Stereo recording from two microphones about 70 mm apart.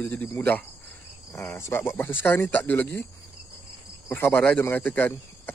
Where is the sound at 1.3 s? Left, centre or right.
Left.